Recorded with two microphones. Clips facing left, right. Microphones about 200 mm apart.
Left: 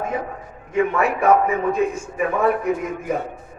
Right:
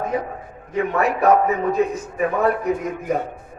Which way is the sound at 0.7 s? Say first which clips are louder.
Left 1 dB; 40° right (ahead or behind).